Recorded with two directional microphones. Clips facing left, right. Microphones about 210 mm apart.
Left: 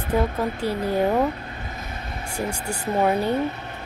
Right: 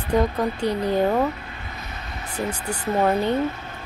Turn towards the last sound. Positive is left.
turn(degrees=10)  # may be behind; listen again after turning